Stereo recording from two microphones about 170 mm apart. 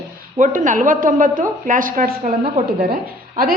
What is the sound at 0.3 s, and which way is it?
Speech, 50° right (ahead or behind).